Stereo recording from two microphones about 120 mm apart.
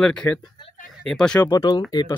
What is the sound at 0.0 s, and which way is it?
Speech, 10° left (ahead or behind).